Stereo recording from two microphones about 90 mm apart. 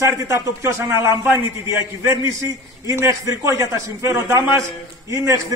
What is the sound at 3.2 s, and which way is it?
A man's voice, 35° right (ahead or behind).